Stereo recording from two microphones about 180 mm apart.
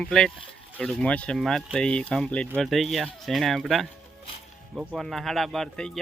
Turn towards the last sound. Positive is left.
turn(degrees=5)  # may be behind; listen again after turning